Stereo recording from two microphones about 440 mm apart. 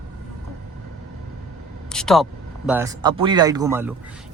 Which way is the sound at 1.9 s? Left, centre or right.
Centre.